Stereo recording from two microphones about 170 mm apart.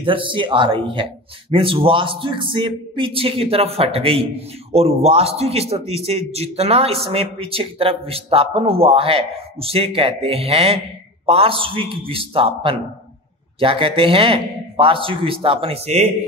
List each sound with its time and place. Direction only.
0.0 s a man's voice: 30° right (ahead or behind)